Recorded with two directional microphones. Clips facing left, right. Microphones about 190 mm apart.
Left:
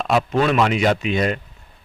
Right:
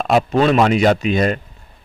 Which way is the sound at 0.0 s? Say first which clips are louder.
Right 4 dB; 40° right (ahead or behind).